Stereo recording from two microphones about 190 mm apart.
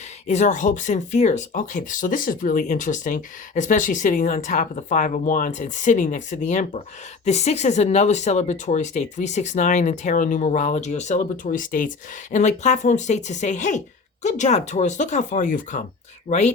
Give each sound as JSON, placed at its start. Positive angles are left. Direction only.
{"t": 0.3, "sound": "speech", "side_deg": 40}